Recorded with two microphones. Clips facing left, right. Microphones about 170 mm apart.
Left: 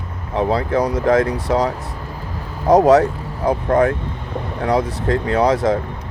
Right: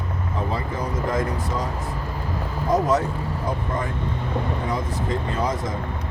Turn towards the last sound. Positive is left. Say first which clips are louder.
# left 10 dB
turn(degrees=75)  # may be behind; listen again after turning